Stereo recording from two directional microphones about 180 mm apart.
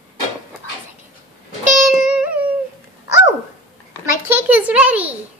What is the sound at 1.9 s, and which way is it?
Music, 5° right (ahead or behind).